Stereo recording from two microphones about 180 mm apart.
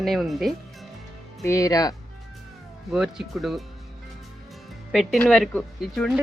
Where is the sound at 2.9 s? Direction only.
Centre (ahead or behind).